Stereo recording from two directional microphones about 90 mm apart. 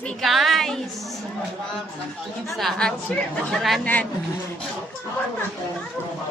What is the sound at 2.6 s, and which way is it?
A man's voice, 5° left (ahead or behind).